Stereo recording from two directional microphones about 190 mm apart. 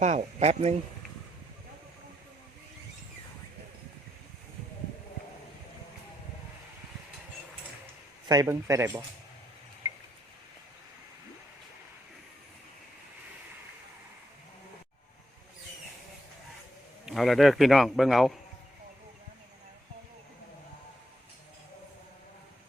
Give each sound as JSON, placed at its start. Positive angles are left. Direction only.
{"t": 0.0, "sound": "speech", "side_deg": -35}
{"t": 8.3, "sound": "a man's voice", "side_deg": -15}
{"t": 17.1, "sound": "a man's voice", "side_deg": 0}